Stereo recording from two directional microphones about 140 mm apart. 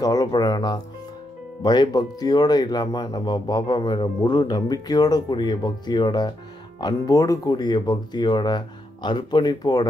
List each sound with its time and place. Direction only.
0.0 s speech: 25° left (ahead or behind)